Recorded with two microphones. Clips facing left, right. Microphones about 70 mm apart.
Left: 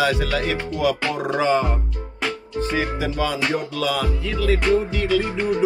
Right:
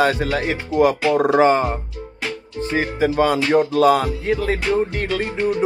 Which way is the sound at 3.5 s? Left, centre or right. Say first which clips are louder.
Right 9 dB; right.